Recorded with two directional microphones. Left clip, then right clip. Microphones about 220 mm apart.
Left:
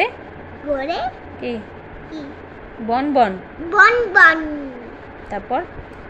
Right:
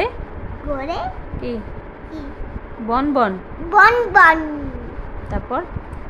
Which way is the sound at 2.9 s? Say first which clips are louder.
Left 1 dB; 10° right (ahead or behind).